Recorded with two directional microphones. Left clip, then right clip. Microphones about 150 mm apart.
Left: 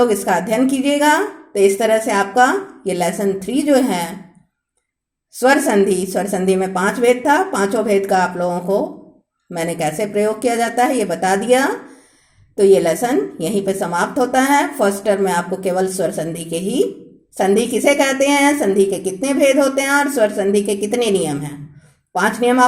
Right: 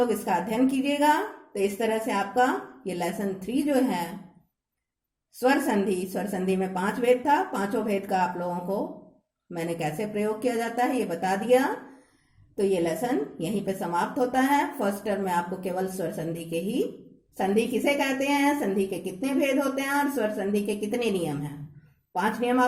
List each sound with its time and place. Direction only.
0.0 s a woman's voice: 35° left (ahead or behind)
5.4 s a woman's voice: 35° left (ahead or behind)